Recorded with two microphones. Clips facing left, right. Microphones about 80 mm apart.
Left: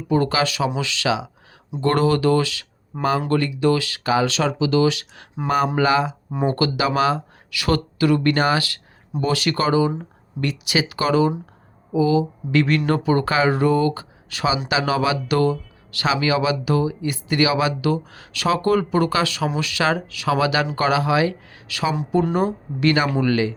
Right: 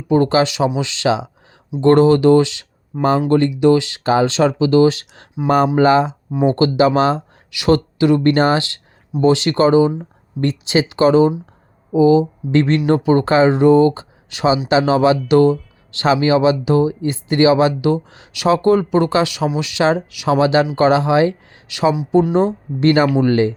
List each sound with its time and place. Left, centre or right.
0.1 s speech: right